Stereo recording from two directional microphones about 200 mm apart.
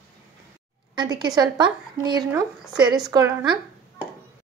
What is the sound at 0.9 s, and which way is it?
A woman's voice, 20° right (ahead or behind).